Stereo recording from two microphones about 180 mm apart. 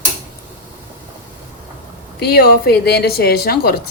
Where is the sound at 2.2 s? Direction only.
60° left (ahead or behind).